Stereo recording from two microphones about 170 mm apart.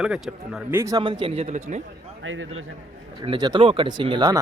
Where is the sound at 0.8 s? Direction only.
20° right (ahead or behind); by 1.8 s 40° right (ahead or behind).